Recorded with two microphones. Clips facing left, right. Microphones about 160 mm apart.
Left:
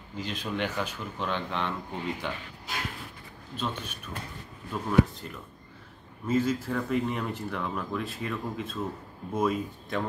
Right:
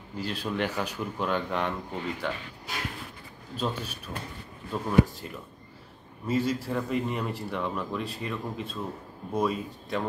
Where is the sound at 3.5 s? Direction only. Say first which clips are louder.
Right 2 dB; 35° right (ahead or behind).